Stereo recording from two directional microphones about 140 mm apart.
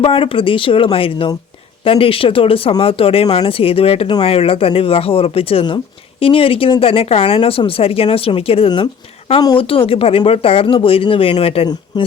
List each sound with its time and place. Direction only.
0.0 s speech: 40° left (ahead or behind)